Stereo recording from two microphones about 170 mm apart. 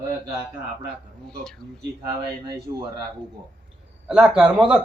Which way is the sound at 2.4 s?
25° right (ahead or behind).